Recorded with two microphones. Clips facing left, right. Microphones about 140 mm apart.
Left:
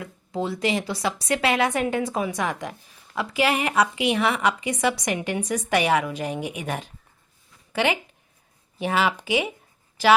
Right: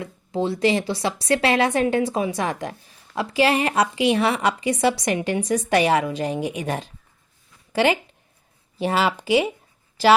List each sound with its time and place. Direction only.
0.0 s a woman's voice: 30° right (ahead or behind)